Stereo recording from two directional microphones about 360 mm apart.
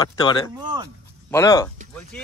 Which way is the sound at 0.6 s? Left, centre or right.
Centre.